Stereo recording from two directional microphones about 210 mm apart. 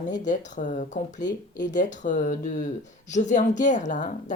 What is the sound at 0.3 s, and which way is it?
Speech, 35° left (ahead or behind).